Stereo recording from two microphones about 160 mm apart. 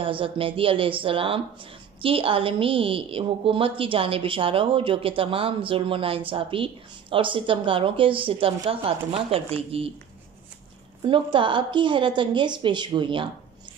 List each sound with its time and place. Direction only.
0.0 s a woman's voice: 35° right (ahead or behind)
11.1 s a woman's voice: 30° right (ahead or behind)